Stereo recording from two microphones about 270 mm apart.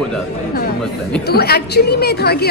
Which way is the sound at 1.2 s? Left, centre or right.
Left.